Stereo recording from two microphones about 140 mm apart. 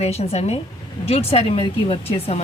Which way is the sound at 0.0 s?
50° left (ahead or behind).